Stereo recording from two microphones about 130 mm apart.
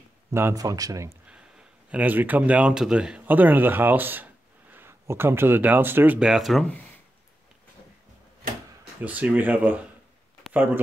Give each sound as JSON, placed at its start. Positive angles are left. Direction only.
{"t": 0.3, "sound": "speech", "side_deg": -20}
{"t": 1.3, "sound": "speech", "side_deg": -10}
{"t": 9.0, "sound": "speech", "side_deg": -10}